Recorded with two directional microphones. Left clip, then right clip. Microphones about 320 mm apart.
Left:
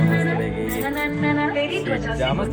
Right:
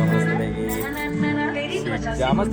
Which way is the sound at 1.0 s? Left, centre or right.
Right.